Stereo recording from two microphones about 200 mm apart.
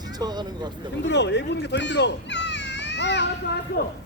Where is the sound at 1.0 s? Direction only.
60° left (ahead or behind).